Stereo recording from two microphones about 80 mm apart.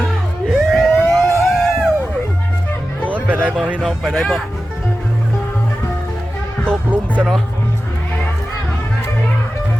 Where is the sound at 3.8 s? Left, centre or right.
Centre.